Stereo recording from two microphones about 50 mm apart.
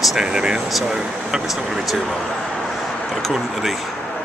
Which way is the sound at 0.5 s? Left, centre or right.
Centre.